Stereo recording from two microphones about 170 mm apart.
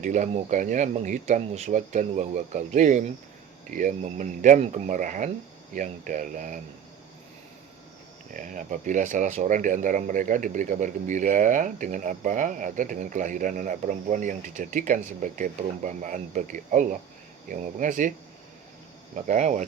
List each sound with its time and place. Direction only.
0.0 s speech: 45° right (ahead or behind)
8.3 s speech: 50° right (ahead or behind)
19.1 s speech: 45° right (ahead or behind)